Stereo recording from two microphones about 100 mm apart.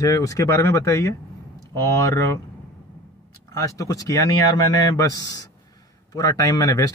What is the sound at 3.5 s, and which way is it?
Speech, 35° left (ahead or behind).